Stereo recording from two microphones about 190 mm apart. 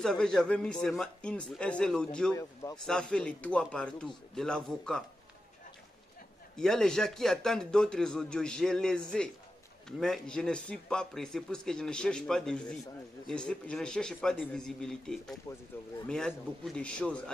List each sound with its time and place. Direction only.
0.0 s speech: 5° left (ahead or behind)
2.3 s a man's voice: 15° left (ahead or behind)
2.8 s speech: 5° left (ahead or behind)
6.5 s speech: centre (ahead or behind)